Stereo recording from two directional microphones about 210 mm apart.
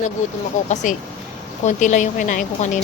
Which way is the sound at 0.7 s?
35° left (ahead or behind).